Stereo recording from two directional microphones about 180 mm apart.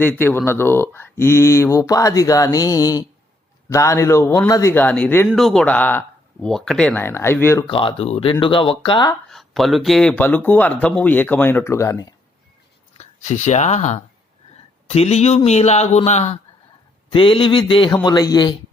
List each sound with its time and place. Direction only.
0.0 s speech: 10° left (ahead or behind)
7.7 s speech: 30° left (ahead or behind)
9.3 s speech: centre (ahead or behind); by 12.0 s 15° left (ahead or behind)
13.0 s speech: 40° left (ahead or behind); by 18.5 s 20° left (ahead or behind)